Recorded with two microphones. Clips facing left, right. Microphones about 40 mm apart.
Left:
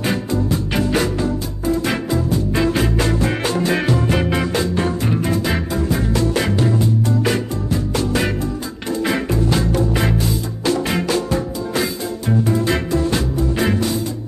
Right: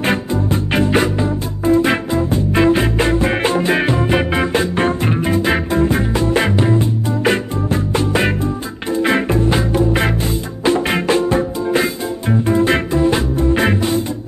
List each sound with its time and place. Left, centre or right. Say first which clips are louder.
0.3 s music: right 2 dB; right
13.4 s music: right 2 dB; right